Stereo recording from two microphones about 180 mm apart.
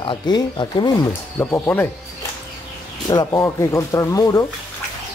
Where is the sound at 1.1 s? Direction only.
15° left (ahead or behind).